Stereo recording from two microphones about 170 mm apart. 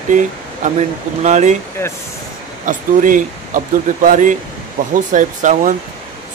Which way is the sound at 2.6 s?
50° right (ahead or behind).